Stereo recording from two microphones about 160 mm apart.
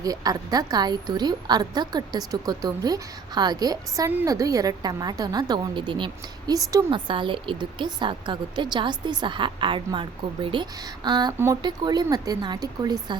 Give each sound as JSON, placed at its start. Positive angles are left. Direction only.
{"t": 0.0, "sound": "a woman's voice", "side_deg": -25}